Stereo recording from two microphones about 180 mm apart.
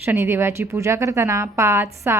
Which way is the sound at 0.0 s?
15° right (ahead or behind).